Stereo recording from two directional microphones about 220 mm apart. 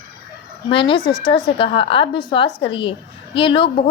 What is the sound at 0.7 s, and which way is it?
A woman's voice, 25° left (ahead or behind).